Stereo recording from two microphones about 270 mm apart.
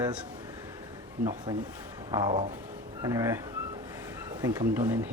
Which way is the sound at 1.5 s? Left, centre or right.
Centre.